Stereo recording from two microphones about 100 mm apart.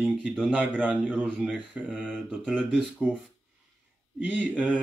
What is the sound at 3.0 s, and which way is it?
Speech, 20° right (ahead or behind).